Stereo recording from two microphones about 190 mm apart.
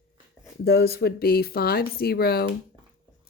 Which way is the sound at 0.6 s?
55° left (ahead or behind).